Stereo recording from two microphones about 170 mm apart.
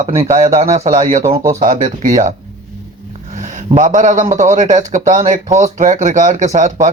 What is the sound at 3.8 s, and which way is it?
Speech, 45° right (ahead or behind).